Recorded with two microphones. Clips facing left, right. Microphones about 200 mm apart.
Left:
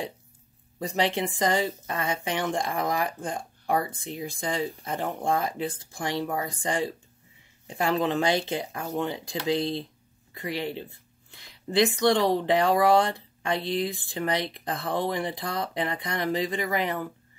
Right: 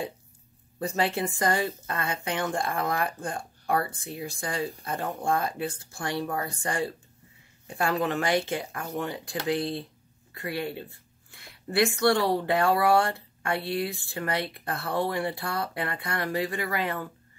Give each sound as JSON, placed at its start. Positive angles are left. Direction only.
{"t": 1.0, "sound": "a woman's voice", "side_deg": 90}
{"t": 1.6, "sound": "speech", "side_deg": 20}